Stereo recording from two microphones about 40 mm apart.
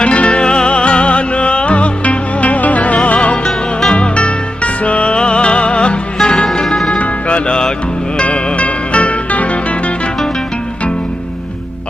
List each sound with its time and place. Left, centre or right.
0.0 s music: left
6.2 s music: centre
6.9 s music: left